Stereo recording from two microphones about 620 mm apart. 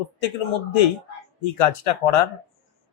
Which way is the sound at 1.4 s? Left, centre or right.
Left.